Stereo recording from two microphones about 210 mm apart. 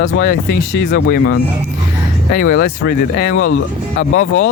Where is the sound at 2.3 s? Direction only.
40° left (ahead or behind).